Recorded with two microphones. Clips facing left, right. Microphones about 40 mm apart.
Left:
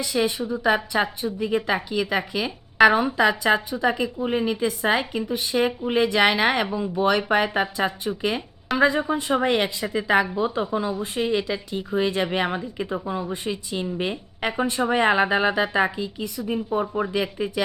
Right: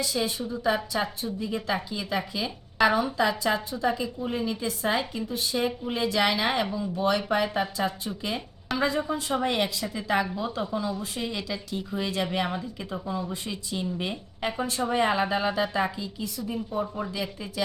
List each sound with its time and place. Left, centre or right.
0.0 s a woman's voice: left